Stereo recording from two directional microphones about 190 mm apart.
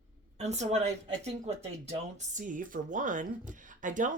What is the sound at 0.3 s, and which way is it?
Speech, 35° right (ahead or behind).